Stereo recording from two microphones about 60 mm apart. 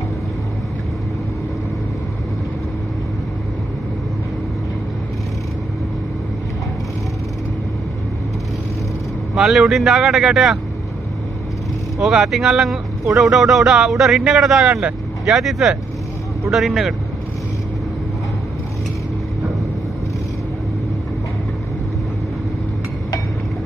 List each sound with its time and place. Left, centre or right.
9.3 s speech: centre
12.0 s speech: centre
14.7 s speech: centre
15.2 s speech: centre